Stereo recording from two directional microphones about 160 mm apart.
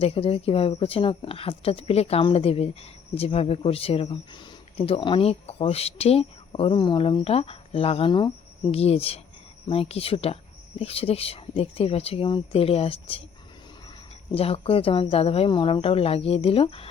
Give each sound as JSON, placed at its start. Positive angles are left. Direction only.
{"t": 0.0, "sound": "speech", "side_deg": 35}
{"t": 14.3, "sound": "speech", "side_deg": 35}